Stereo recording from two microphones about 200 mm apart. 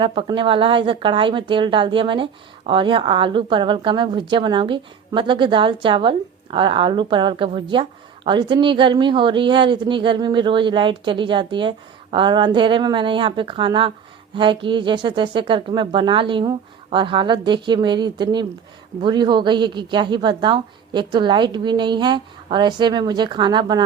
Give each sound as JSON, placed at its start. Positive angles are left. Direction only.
{"t": 0.0, "sound": "speech", "side_deg": -25}